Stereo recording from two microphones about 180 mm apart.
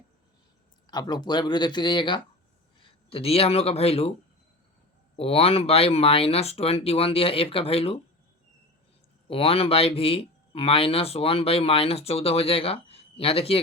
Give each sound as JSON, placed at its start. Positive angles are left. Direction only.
{"t": 0.9, "sound": "speech", "side_deg": 20}
{"t": 5.1, "sound": "speech", "side_deg": 35}
{"t": 9.3, "sound": "speech", "side_deg": 30}